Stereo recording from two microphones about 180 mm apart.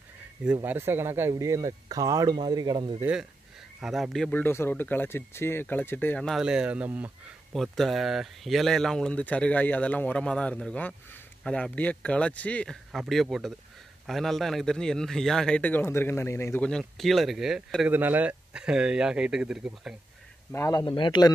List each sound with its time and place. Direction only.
0.7 s speech: 10° right (ahead or behind)
3.0 s a man's voice: 5° right (ahead or behind)
20.5 s speech: 15° left (ahead or behind)
20.8 s speech: 25° left (ahead or behind)